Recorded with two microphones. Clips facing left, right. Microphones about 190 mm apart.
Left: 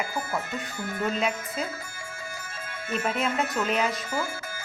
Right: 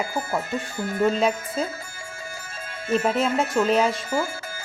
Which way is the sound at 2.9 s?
30° right (ahead or behind).